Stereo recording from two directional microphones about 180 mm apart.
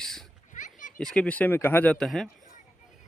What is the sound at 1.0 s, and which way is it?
Speech, 5° left (ahead or behind).